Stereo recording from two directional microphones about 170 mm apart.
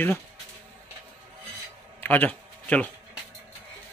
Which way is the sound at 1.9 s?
10° left (ahead or behind).